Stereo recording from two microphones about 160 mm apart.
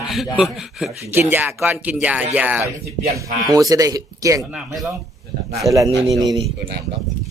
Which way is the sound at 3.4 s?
25° right (ahead or behind).